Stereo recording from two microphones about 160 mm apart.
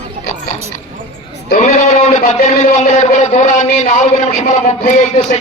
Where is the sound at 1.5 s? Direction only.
50° left (ahead or behind).